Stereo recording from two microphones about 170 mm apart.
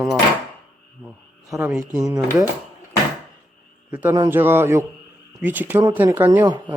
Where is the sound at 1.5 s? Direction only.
Centre (ahead or behind).